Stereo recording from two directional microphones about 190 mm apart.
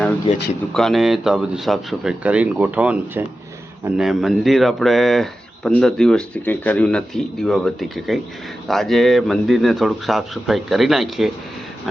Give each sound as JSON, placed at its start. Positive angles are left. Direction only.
{"t": 0.3, "sound": "speech", "side_deg": 35}
{"t": 0.7, "sound": "speech", "side_deg": 0}